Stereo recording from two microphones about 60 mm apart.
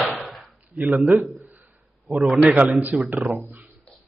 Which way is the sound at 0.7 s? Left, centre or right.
Right.